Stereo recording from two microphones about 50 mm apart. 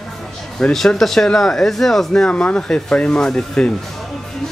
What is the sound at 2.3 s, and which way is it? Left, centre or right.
Speech, left.